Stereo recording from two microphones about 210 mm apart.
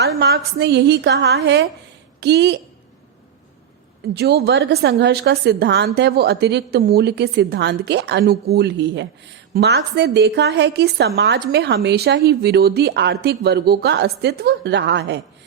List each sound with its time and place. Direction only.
0.2 s a woman's voice: 55° right (ahead or behind)
4.1 s a woman's voice: 50° right (ahead or behind)